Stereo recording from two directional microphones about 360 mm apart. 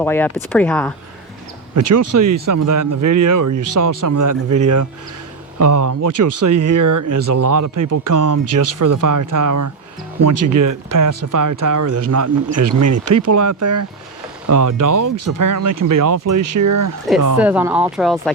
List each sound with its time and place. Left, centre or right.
0.0 s speech: centre
1.7 s speech: right
2.1 s speech: right
8.4 s speech: right
8.8 s speech: right
17.3 s speech: centre